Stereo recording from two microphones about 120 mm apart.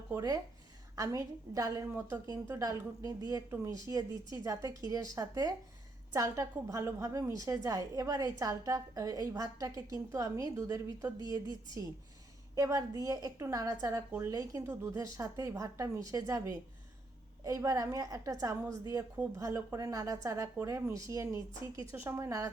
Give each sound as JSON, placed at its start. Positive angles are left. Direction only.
{"t": 0.1, "sound": "a woman's voice", "side_deg": -30}
{"t": 12.5, "sound": "a woman's voice", "side_deg": -30}